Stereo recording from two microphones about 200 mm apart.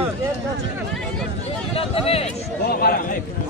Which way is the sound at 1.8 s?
30° left (ahead or behind).